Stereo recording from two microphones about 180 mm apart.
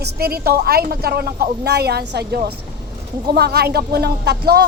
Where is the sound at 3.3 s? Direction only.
60° right (ahead or behind).